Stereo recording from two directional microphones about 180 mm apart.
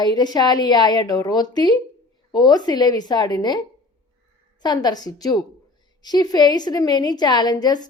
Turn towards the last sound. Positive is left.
turn(degrees=20)  # may be behind; listen again after turning